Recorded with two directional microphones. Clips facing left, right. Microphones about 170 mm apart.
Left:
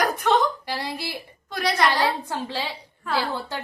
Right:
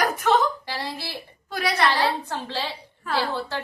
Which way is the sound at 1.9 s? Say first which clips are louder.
Even; 10° left (ahead or behind).